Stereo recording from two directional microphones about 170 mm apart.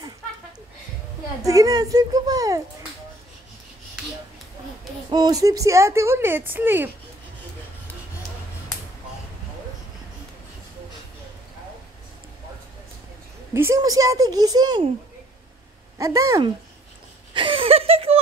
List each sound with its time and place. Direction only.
1.4 s speech: 20° right (ahead or behind)
5.1 s speech: 20° right (ahead or behind)
13.5 s speech: 15° right (ahead or behind)
16.0 s speech: 20° right (ahead or behind)
17.3 s a sound: 30° right (ahead or behind)